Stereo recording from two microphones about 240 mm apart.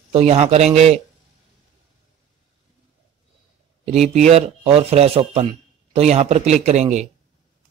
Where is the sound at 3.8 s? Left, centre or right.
Right.